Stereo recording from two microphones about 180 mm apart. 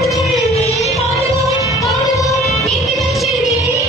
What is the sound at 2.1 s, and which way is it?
Music, 20° left (ahead or behind).